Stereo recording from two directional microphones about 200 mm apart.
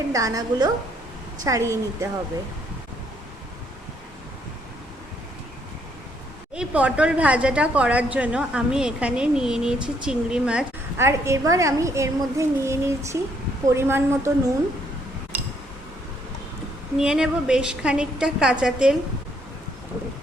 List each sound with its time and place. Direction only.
0.1 s a woman's voice: 15° right (ahead or behind)
6.6 s a woman's voice: 5° right (ahead or behind)
17.0 s a woman's voice: 5° right (ahead or behind)